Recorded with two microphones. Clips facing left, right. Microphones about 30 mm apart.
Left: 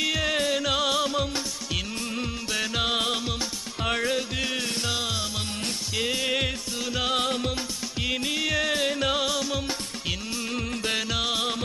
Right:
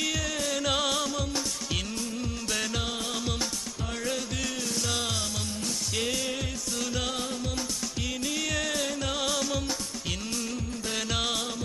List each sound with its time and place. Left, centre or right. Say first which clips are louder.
0.0 s music: left 5 dB; left
0.6 s music: left 3 dB; centre
1.0 s music: left 5 dB; left
2.5 s music: left 3 dB; centre
2.8 s music: left 6 dB; left
4.1 s music: left 4 dB; left
6.0 s music: left 3 dB; left
6.2 s music: left 7 dB; left
6.7 s music: left 2 dB; left
7.1 s music: left 7 dB; left
8.0 s music: left 5 dB; left
9.2 s music: left 2 dB; centre
11.1 s music: left 2 dB; centre